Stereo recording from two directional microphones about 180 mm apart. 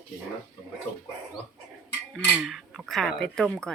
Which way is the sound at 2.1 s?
Centre (ahead or behind).